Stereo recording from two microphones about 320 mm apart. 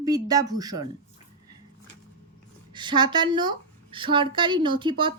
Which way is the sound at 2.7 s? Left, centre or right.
Centre.